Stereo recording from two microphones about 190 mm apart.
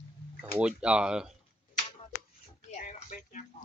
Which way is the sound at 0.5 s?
5° right (ahead or behind).